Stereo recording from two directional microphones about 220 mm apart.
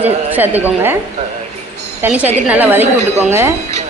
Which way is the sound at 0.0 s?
10° right (ahead or behind).